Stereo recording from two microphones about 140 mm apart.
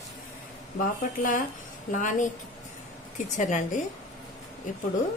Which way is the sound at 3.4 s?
65° left (ahead or behind).